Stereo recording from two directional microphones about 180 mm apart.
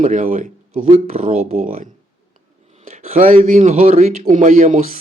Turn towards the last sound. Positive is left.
turn(degrees=-45)  # may be behind; listen again after turning